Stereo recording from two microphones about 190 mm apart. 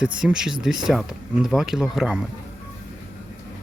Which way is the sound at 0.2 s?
5° right (ahead or behind).